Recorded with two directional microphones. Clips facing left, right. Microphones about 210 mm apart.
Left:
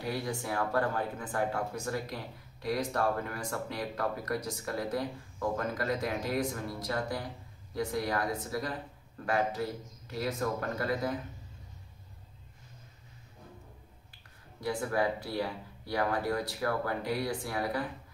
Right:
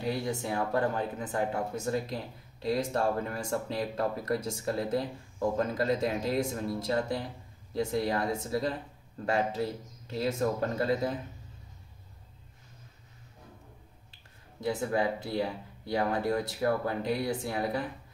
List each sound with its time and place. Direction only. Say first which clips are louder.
0.0 s speech: right 3 dB; 20° right (ahead or behind)
14.6 s speech: right 2 dB; 25° right (ahead or behind)